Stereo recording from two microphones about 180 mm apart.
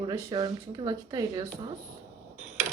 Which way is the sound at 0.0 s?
20° right (ahead or behind).